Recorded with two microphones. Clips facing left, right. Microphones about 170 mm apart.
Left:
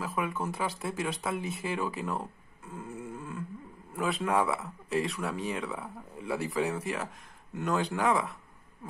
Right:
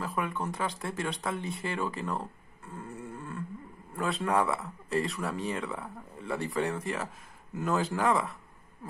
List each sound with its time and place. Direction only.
0.0 s speech: 5° left (ahead or behind)